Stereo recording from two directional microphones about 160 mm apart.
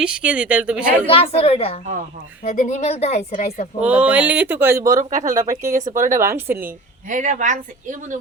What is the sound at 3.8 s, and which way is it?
Speech, 10° right (ahead or behind).